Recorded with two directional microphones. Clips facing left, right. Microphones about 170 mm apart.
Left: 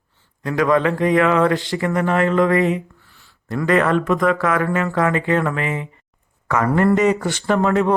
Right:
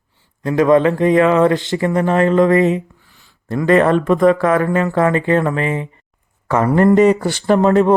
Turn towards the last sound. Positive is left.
turn(degrees=-35)  # may be behind; listen again after turning